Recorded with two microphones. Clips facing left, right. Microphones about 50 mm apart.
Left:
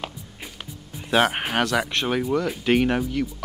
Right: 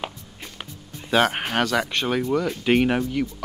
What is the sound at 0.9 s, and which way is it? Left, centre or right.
Speech, centre.